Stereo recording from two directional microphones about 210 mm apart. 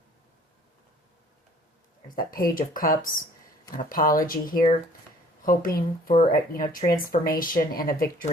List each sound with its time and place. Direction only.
2.1 s speech: 45° left (ahead or behind)